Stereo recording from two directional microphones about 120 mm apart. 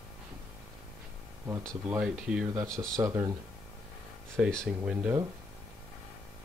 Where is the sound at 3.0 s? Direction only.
25° right (ahead or behind).